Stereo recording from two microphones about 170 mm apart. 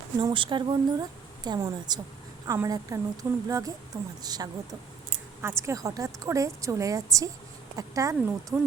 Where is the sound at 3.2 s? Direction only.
15° right (ahead or behind).